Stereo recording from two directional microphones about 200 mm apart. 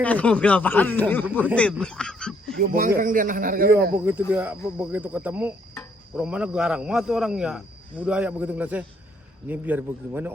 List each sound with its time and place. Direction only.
0.0 s speech: 5° left (ahead or behind)
2.6 s a man's voice: 45° right (ahead or behind)
3.9 s speech: 10° right (ahead or behind)